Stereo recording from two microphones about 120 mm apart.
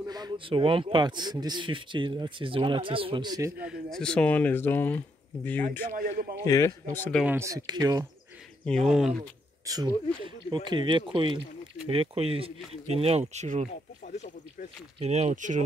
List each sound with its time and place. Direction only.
0.0 s a sound: 35° right (ahead or behind)
0.5 s speech: 45° right (ahead or behind)
3.3 s speech: 30° right (ahead or behind)
3.9 s speech: 10° left (ahead or behind)
5.9 s a man's voice: 90° right
6.4 s a man's voice: 25° left (ahead or behind)
7.2 s speech: 25° right (ahead or behind)
8.6 s speech: 5° left (ahead or behind)
9.6 s speech: 30° right (ahead or behind)
10.2 s speech: 40° right (ahead or behind); by 13.7 s 70° right (ahead or behind)
14.0 s speech: 80° left
15.0 s speech: 65° right (ahead or behind); by 15.6 s 80° right